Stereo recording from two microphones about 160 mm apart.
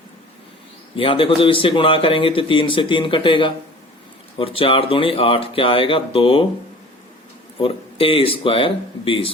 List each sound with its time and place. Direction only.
0.9 s speech: 35° left (ahead or behind)
7.6 s speech: 35° left (ahead or behind)